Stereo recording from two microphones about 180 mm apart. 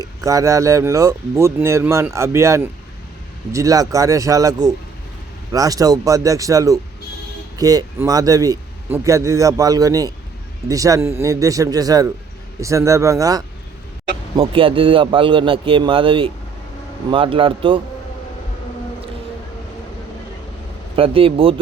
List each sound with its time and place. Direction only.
0.0 s a man's voice: 20° right (ahead or behind)
14.3 s a man's voice: 30° right (ahead or behind)
20.9 s a man's voice: 30° right (ahead or behind)